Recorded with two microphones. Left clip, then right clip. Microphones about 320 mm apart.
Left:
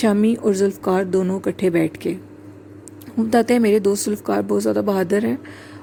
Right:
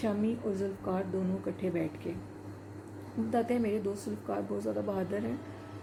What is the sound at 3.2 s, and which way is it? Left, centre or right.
A woman's voice, left.